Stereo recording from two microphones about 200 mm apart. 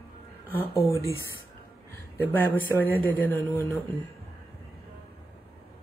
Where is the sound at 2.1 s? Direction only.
10° left (ahead or behind).